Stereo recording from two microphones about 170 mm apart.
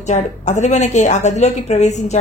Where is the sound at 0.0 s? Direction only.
45° left (ahead or behind).